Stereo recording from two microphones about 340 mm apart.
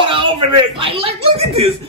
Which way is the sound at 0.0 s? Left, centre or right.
Centre.